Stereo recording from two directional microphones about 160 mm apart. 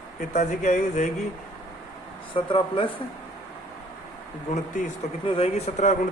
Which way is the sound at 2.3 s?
35° left (ahead or behind).